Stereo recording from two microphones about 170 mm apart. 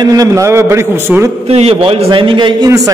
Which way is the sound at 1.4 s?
35° right (ahead or behind).